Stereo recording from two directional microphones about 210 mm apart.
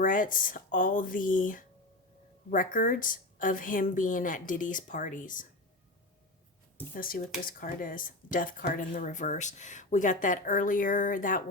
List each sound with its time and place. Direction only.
0.0 s speech: 40° left (ahead or behind)
6.9 s speech: 45° left (ahead or behind)